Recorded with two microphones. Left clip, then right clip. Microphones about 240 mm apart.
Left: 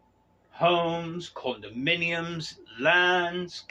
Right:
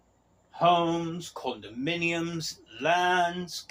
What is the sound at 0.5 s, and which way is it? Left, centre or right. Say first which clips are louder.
Speech: right 1 dB; left.